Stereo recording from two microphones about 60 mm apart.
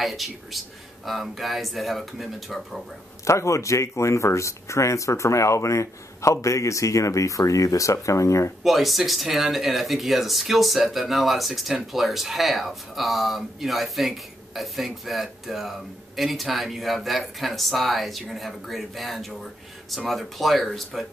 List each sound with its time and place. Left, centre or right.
0.0 s speech: centre
3.3 s speech: left
8.6 s speech: centre